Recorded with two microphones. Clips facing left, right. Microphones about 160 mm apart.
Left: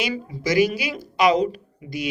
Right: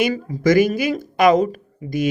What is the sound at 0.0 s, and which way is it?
Speech, 45° right (ahead or behind).